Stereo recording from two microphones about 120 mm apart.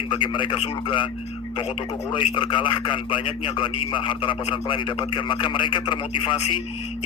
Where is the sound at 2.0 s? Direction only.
40° left (ahead or behind).